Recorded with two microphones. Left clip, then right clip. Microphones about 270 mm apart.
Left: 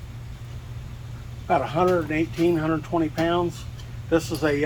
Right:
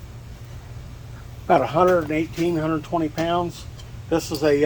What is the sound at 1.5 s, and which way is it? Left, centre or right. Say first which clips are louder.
Speech: right 4 dB; right.